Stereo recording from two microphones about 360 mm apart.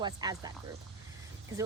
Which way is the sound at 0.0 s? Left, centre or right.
Centre.